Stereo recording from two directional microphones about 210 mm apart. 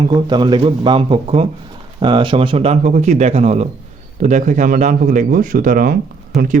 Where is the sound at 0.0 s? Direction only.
20° right (ahead or behind).